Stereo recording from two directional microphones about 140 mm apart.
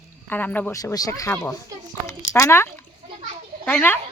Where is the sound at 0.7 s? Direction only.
25° left (ahead or behind).